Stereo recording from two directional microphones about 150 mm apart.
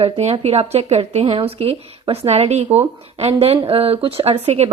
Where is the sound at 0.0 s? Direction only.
45° right (ahead or behind).